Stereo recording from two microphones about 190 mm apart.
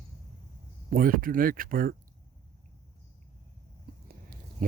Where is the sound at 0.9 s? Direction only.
50° right (ahead or behind).